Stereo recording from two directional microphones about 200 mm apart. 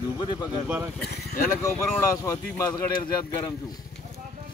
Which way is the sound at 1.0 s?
55° left (ahead or behind).